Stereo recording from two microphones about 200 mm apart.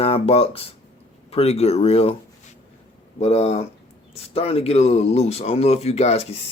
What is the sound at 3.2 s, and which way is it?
Speech, 35° left (ahead or behind).